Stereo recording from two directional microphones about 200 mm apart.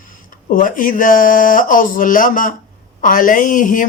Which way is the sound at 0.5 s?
45° left (ahead or behind).